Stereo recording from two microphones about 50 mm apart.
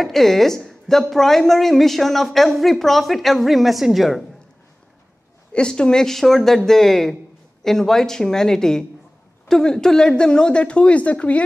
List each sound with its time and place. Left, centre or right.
0.0 s a woman's voice: centre
5.5 s a woman's voice: centre